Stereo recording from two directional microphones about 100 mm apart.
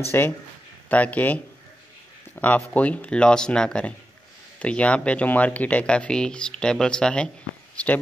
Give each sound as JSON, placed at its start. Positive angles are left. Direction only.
{"t": 0.1, "sound": "speech", "side_deg": 25}